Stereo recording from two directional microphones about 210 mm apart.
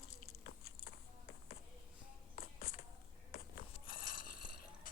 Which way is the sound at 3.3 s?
45° left (ahead or behind).